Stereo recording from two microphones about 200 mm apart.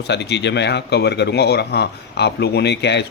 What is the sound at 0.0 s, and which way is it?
Speech, 60° left (ahead or behind).